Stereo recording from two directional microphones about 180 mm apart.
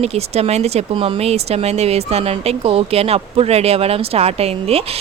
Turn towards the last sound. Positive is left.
turn(degrees=-35)  # may be behind; listen again after turning